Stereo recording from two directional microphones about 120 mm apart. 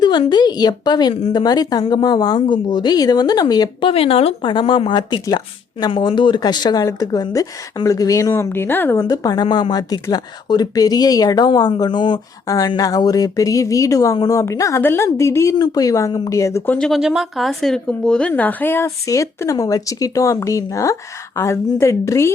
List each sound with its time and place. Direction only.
0.0 s a woman's voice: 40° left (ahead or behind); by 9.0 s 15° left (ahead or behind)
9.0 s a woman's voice: 30° left (ahead or behind)
16.7 s speech: centre (ahead or behind); by 22.3 s 25° left (ahead or behind)